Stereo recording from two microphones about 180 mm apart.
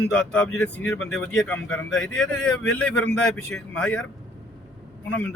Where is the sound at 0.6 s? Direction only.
10° left (ahead or behind).